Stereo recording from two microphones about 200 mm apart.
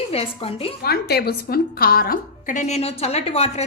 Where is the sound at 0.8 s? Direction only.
50° left (ahead or behind).